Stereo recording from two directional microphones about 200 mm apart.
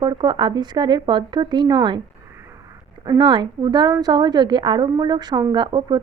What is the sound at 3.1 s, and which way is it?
A woman's voice, 20° right (ahead or behind).